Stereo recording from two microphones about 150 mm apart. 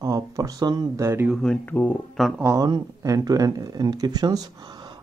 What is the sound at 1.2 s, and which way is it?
Speech, centre (ahead or behind).